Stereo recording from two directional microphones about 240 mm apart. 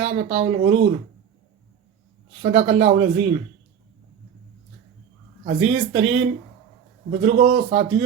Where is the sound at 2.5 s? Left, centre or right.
Right.